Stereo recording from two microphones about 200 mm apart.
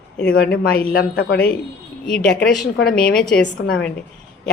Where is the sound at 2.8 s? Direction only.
50° left (ahead or behind).